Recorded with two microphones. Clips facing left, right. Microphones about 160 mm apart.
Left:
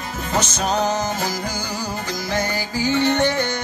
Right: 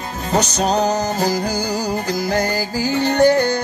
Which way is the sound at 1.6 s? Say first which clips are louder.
Right 6 dB; 10° right (ahead or behind).